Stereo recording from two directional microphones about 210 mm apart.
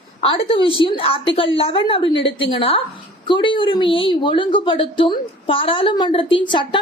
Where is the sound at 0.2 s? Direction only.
25° left (ahead or behind).